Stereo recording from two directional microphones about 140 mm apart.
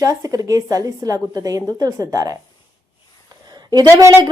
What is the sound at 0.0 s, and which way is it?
A woman's voice, 25° right (ahead or behind).